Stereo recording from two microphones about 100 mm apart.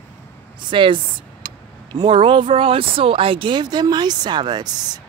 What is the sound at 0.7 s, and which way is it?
A woman's voice, 55° right (ahead or behind).